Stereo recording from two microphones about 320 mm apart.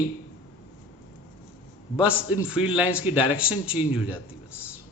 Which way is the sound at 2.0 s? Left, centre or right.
Centre.